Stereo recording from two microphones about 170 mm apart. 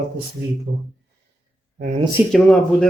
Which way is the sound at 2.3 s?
5° left (ahead or behind).